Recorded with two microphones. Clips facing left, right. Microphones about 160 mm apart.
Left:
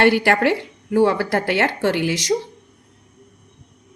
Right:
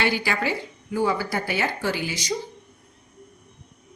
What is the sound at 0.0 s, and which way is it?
Speech, 65° left (ahead or behind).